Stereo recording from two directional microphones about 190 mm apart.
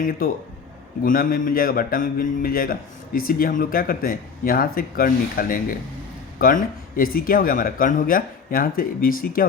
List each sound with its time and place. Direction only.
0.0 s a man's voice: 50° left (ahead or behind)